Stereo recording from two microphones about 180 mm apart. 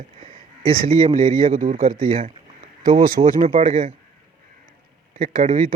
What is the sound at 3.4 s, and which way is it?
Speech, 45° right (ahead or behind).